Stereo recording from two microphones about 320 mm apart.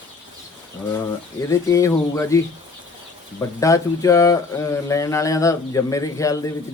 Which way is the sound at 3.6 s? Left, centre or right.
Centre.